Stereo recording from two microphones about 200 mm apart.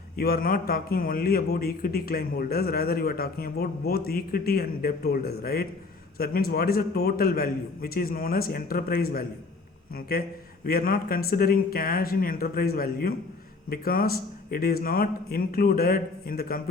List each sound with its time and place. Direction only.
0.2 s a man's voice: 45° left (ahead or behind)